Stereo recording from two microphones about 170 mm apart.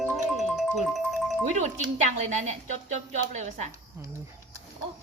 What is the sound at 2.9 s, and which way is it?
Speech, 45° right (ahead or behind).